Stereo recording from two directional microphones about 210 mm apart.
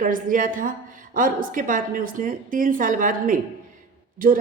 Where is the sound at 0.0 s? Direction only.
40° right (ahead or behind).